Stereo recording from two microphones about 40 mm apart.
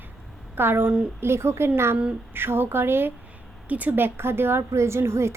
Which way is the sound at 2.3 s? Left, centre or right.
Right.